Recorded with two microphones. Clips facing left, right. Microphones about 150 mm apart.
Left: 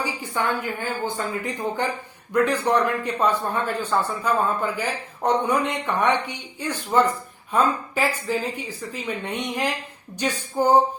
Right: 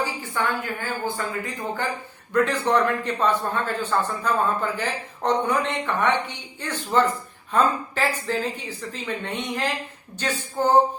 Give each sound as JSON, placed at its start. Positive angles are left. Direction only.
{"t": 0.0, "sound": "a woman's voice", "side_deg": 15}